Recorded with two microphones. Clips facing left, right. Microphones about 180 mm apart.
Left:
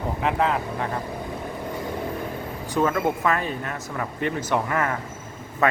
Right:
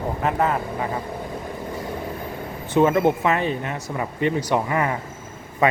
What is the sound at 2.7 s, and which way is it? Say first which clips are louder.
Speech: right 5 dB; 20° right (ahead or behind).